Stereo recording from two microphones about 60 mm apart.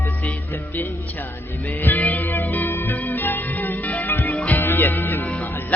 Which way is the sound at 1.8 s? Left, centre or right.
Left.